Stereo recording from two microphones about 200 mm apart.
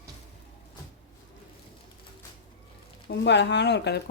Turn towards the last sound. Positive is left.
turn(degrees=60)  # may be behind; listen again after turning